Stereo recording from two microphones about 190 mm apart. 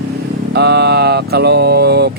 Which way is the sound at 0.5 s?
60° right (ahead or behind).